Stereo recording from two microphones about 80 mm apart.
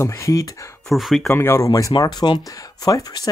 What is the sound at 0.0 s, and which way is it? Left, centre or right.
Speech, left.